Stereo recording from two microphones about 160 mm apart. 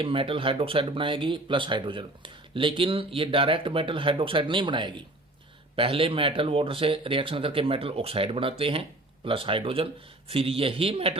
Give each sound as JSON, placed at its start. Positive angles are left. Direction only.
{"t": 0.0, "sound": "speech", "side_deg": -35}